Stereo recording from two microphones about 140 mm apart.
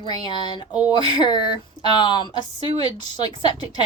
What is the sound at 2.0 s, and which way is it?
A woman's voice, 35° left (ahead or behind).